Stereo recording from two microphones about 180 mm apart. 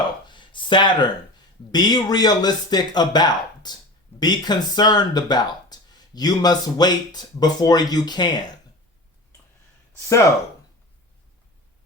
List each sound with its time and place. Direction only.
0.3 s speech: 25° left (ahead or behind)